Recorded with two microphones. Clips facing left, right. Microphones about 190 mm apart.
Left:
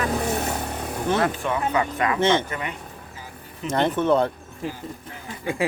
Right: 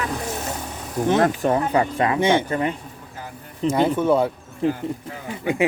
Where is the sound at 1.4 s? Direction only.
35° right (ahead or behind).